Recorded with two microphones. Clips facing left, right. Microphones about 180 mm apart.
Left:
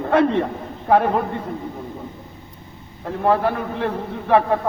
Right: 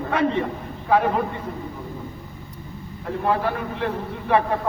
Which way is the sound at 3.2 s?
60° left (ahead or behind).